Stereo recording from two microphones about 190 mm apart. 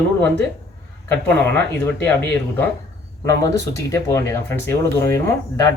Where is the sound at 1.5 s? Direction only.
10° left (ahead or behind).